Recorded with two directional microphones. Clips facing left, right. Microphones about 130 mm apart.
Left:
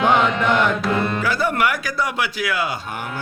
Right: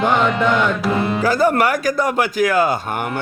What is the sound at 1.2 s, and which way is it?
Speech, 40° right (ahead or behind).